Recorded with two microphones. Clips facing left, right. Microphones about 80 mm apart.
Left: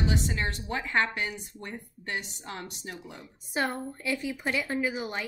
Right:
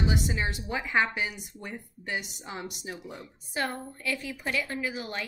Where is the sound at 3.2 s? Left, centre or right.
Centre.